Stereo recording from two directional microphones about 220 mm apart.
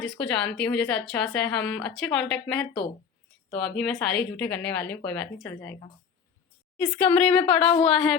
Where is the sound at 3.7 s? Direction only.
5° left (ahead or behind).